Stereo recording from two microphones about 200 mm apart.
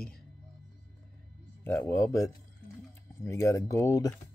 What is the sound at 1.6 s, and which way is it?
Speech, 10° left (ahead or behind).